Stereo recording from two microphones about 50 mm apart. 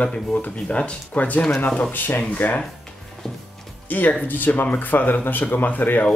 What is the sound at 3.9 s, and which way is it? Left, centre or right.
Speech, left.